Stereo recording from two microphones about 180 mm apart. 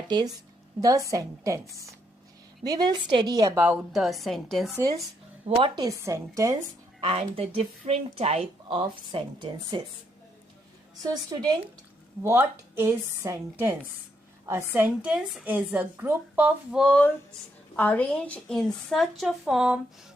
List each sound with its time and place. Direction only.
0.8 s a woman's voice: 20° right (ahead or behind)
3.7 s a woman's voice: centre (ahead or behind)
4.8 s a woman's voice: 20° right (ahead or behind)
5.5 s a woman's voice: 30° right (ahead or behind)
7.1 s a woman's voice: 35° right (ahead or behind)
11.0 s a woman's voice: 20° right (ahead or behind)
16.8 s a sound: 10° left (ahead or behind)
17.7 s a woman's voice: 10° left (ahead or behind)